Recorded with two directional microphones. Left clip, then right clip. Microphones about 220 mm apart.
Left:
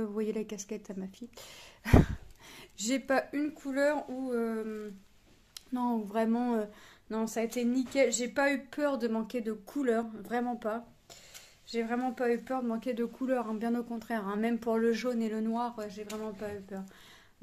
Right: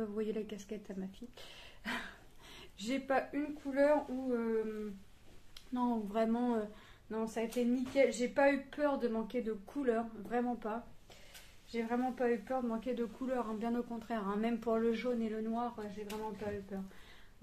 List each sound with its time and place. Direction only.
0.0 s speech: 35° left (ahead or behind)
5.5 s speech: 40° left (ahead or behind)
7.1 s speech: 45° left (ahead or behind)
16.7 s speech: 50° left (ahead or behind)